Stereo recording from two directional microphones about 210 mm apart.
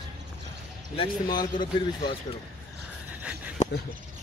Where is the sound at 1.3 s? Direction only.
20° left (ahead or behind).